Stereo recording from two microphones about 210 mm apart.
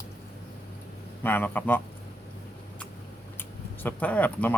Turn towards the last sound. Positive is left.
turn(degrees=5)  # may be behind; listen again after turning